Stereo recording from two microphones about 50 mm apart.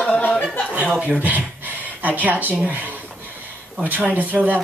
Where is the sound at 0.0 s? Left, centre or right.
Left.